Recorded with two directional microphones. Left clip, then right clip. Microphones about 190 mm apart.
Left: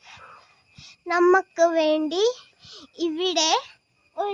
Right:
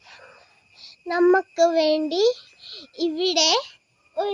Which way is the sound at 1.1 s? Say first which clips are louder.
Even; 20° left (ahead or behind).